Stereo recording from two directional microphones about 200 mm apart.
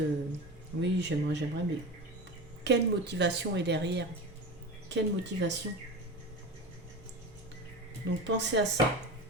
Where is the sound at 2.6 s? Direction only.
60° right (ahead or behind).